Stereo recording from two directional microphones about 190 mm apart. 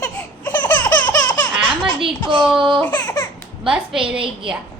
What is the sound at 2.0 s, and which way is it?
Speech, 25° right (ahead or behind).